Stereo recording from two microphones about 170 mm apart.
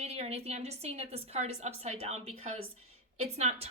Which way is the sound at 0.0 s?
40° right (ahead or behind).